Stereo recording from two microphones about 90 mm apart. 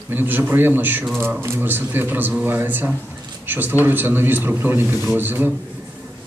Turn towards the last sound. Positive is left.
turn(degrees=-20)  # may be behind; listen again after turning